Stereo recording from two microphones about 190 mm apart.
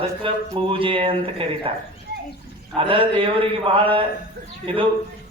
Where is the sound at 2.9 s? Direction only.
30° right (ahead or behind).